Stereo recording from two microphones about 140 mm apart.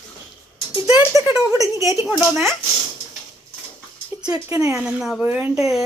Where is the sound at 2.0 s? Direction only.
Centre (ahead or behind).